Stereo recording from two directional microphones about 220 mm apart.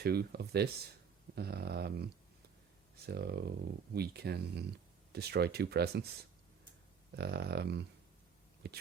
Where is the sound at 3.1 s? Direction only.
45° right (ahead or behind).